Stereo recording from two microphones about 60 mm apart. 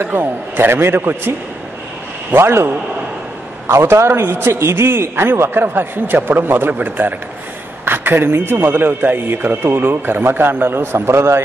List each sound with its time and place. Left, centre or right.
0.0 s a man's voice: right
2.3 s a man's voice: right